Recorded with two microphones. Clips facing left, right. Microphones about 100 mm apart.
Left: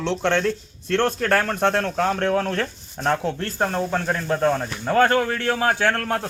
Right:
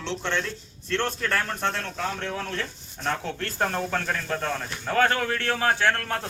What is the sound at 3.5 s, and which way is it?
A man's voice, 15° left (ahead or behind).